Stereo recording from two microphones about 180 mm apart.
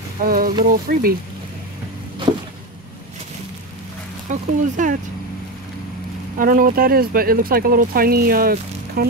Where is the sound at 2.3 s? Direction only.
25° right (ahead or behind).